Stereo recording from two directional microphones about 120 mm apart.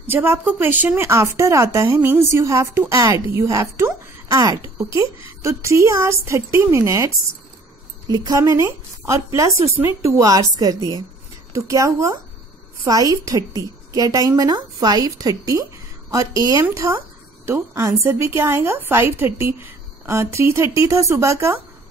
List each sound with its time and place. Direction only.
0.0 s a woman's voice: 15° right (ahead or behind)
8.1 s a woman's voice: 30° right (ahead or behind)